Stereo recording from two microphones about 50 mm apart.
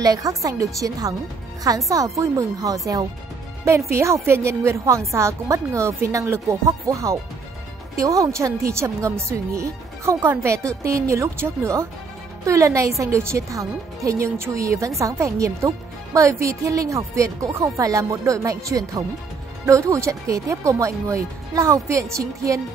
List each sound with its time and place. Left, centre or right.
0.3 s a woman's voice: right
3.6 s a woman's voice: right
11.6 s speech: right
12.4 s a woman's voice: right